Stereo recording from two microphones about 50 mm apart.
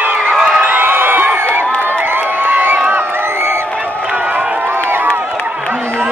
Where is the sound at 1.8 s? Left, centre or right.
Right.